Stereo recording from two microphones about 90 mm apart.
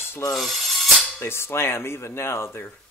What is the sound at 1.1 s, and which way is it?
Speech, 25° left (ahead or behind).